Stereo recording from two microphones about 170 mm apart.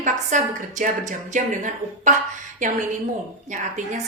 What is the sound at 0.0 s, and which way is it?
A woman's voice, 50° right (ahead or behind).